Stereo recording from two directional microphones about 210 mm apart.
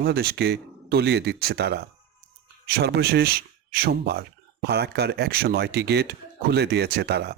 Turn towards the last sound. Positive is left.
turn(degrees=-50)  # may be behind; listen again after turning